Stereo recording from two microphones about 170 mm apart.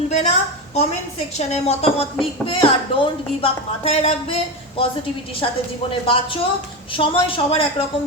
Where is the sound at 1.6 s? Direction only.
35° left (ahead or behind).